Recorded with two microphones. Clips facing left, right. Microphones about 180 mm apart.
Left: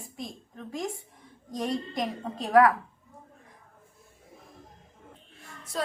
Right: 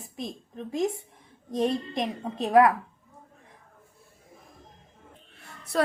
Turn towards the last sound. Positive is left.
turn(degrees=-65)  # may be behind; listen again after turning